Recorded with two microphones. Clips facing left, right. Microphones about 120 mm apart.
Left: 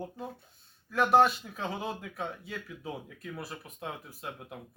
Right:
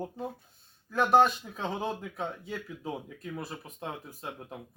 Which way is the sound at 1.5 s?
25° right (ahead or behind).